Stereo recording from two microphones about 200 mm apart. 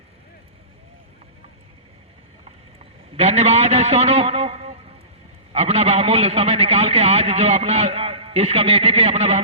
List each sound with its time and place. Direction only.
3.2 s a man's voice: 30° right (ahead or behind)